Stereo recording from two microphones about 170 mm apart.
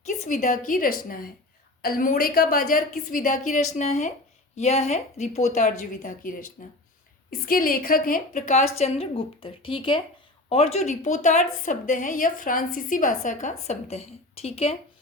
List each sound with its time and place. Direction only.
0.0 s a woman's voice: 45° left (ahead or behind)